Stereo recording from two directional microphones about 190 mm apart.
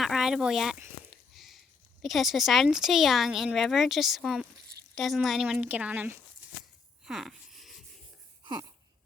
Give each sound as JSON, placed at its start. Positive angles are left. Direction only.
{"t": 0.0, "sound": "a woman's voice", "side_deg": 0}
{"t": 7.0, "sound": "wheeze", "side_deg": 0}
{"t": 8.4, "sound": "a sound", "side_deg": -20}